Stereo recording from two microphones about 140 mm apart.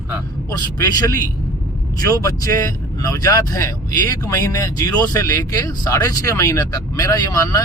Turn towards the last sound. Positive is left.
turn(degrees=25)  # may be behind; listen again after turning